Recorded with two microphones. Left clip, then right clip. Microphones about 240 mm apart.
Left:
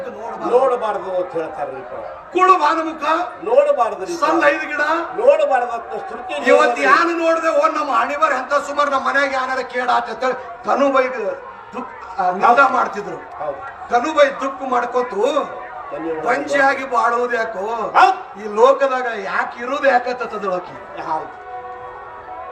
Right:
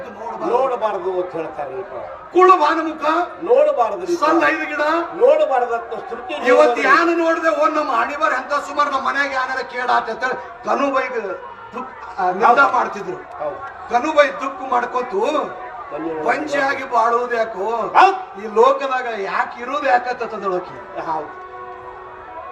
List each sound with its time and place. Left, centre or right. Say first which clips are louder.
0.5 s a man's voice: left 3 dB; left
2.3 s a man's voice: right 1 dB; left